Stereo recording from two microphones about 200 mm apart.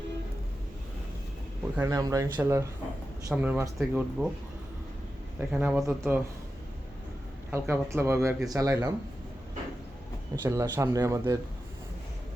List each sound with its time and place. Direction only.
1.7 s speech: 15° right (ahead or behind)
5.4 s speech: 10° right (ahead or behind)
7.5 s speech: 15° right (ahead or behind)
10.4 s speech: 15° right (ahead or behind)